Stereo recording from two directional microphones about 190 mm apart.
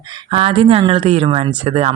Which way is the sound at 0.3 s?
30° right (ahead or behind).